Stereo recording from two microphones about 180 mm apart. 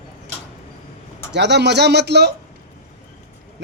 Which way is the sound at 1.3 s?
75° right (ahead or behind).